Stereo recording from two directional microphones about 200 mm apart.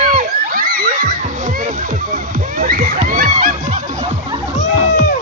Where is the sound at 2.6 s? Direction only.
45° right (ahead or behind).